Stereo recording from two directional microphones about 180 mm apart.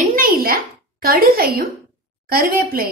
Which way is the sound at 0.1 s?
55° right (ahead or behind).